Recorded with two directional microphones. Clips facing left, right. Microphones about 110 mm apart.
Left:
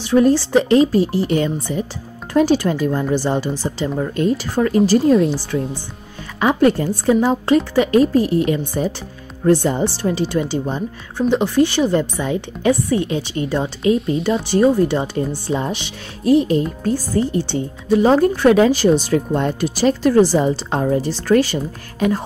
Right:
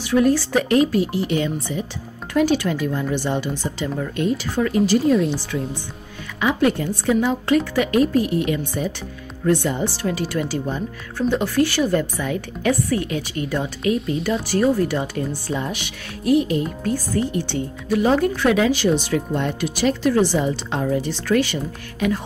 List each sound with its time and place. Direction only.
0.0 s speech: 30° left (ahead or behind)
6.4 s speech: 40° left (ahead or behind)